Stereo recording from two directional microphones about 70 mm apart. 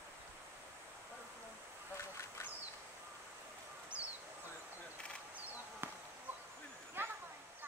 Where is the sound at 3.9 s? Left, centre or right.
Centre.